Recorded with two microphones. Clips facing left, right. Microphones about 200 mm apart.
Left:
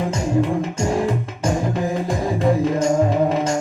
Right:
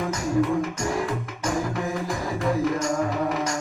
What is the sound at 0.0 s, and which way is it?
Music, 25° left (ahead or behind).